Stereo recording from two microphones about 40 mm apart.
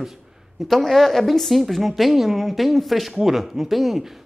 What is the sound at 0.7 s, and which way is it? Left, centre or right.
A woman's voice, centre.